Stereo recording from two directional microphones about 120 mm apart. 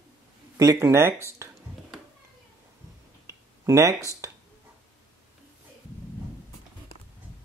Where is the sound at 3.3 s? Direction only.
25° right (ahead or behind).